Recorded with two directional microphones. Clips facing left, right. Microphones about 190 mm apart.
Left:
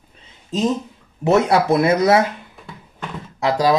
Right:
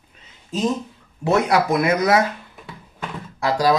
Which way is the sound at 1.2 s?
25° left (ahead or behind).